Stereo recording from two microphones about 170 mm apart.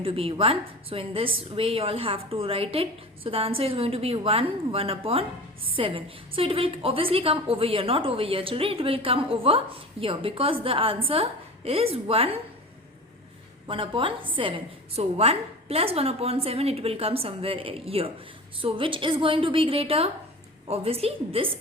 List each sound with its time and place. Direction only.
0.0 s a woman's voice: 35° right (ahead or behind)
13.7 s a woman's voice: 30° right (ahead or behind)